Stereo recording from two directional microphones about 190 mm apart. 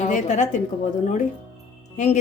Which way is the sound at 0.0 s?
40° left (ahead or behind).